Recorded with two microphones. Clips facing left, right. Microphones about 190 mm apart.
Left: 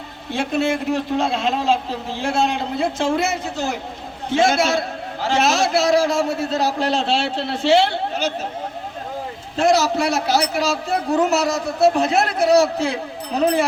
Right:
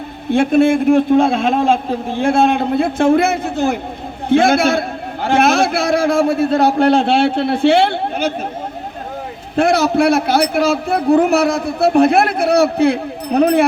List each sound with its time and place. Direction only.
0.3 s a man's voice: 55° right (ahead or behind)
9.6 s a man's voice: 55° right (ahead or behind)